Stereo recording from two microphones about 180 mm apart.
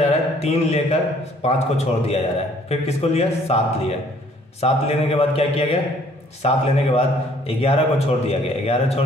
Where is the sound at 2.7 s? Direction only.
35° left (ahead or behind).